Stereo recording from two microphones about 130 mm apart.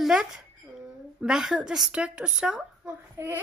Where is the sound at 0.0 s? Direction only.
5° right (ahead or behind).